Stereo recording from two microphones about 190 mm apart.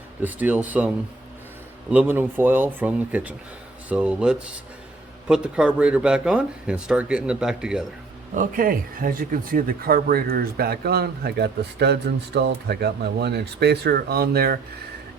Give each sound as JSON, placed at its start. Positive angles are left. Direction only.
{"t": 0.2, "sound": "speech", "side_deg": -10}
{"t": 1.9, "sound": "speech", "side_deg": -10}
{"t": 8.4, "sound": "speech", "side_deg": -45}